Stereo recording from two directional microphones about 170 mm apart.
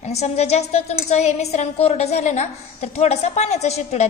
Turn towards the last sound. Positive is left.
turn(degrees=40)  # may be behind; listen again after turning